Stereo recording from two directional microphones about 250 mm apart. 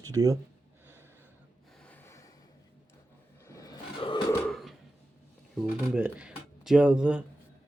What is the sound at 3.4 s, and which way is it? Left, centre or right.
Roar, centre.